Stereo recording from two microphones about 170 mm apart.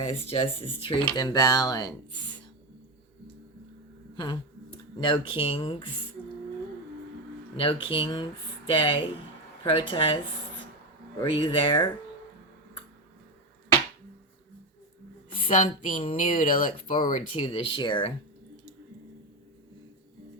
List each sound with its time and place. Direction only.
0.0 s speech: 35° left (ahead or behind)
4.9 s speech: 30° left (ahead or behind)
7.5 s speech: 30° left (ahead or behind)
11.3 s speech: 30° left (ahead or behind)
15.4 s speech: 50° left (ahead or behind); by 18.1 s 25° left (ahead or behind)